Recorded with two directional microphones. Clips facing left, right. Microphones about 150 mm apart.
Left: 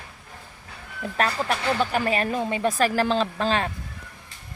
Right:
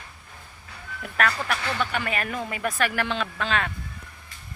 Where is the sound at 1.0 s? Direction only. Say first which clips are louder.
Left 1 dB; 30° left (ahead or behind).